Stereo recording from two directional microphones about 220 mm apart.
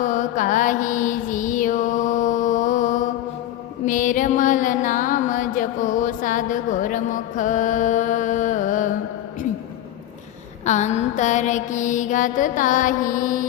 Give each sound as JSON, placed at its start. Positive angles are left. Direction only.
{"t": 0.0, "sound": "mantra", "side_deg": 35}
{"t": 3.8, "sound": "music", "side_deg": 35}
{"t": 10.7, "sound": "mantra", "side_deg": 30}